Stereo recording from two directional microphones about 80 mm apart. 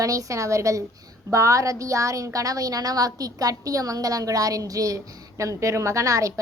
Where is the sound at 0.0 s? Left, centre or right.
Right.